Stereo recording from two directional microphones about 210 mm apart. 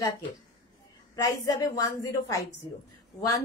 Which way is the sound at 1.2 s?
20° left (ahead or behind).